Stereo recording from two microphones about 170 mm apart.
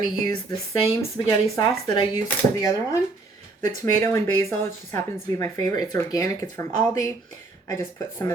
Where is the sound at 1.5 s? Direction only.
25° left (ahead or behind).